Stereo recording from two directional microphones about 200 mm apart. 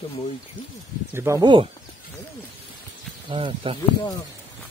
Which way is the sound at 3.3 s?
25° right (ahead or behind).